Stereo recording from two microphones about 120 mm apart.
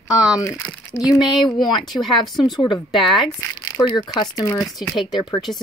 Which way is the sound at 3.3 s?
25° left (ahead or behind).